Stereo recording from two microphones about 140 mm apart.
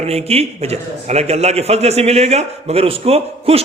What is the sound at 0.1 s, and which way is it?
A man's voice, 50° right (ahead or behind).